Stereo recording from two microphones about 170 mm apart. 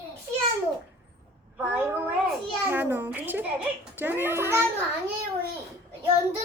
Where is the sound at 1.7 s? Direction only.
10° right (ahead or behind).